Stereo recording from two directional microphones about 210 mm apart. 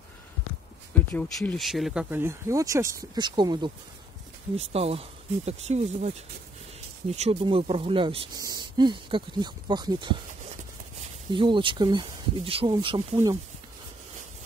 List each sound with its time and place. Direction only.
1.1 s speech: 5° left (ahead or behind); by 10.1 s 20° right (ahead or behind)
11.3 s speech: 25° right (ahead or behind)